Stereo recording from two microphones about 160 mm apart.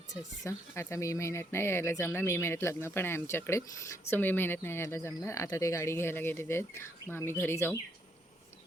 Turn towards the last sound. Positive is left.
turn(degrees=15)  # may be behind; listen again after turning